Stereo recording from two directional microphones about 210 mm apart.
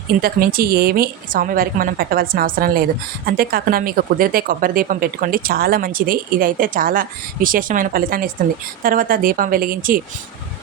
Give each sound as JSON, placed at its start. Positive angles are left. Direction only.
{"t": 0.2, "sound": "speech", "side_deg": -45}